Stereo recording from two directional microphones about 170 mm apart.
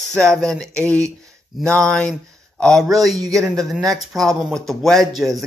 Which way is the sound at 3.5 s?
Centre (ahead or behind).